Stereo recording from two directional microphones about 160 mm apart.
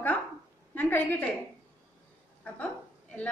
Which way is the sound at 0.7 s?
10° left (ahead or behind).